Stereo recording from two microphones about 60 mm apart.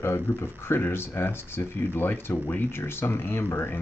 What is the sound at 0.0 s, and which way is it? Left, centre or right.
Speech, left.